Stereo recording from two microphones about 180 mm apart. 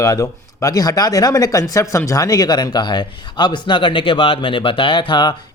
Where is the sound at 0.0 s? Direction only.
20° left (ahead or behind).